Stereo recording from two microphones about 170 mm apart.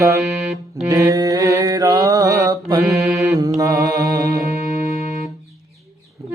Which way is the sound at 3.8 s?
65° right (ahead or behind).